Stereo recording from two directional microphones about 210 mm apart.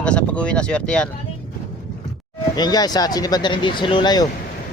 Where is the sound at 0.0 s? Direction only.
5° left (ahead or behind).